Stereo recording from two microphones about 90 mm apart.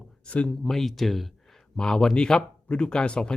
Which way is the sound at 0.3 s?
15° left (ahead or behind).